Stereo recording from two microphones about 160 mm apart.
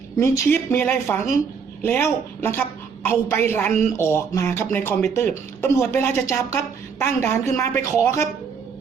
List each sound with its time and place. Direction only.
0.2 s a woman's voice: 15° left (ahead or behind)